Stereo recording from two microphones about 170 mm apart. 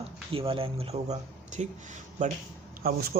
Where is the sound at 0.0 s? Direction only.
30° right (ahead or behind).